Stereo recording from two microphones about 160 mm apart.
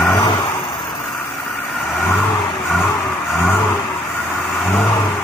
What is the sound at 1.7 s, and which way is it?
Vehicle, centre (ahead or behind).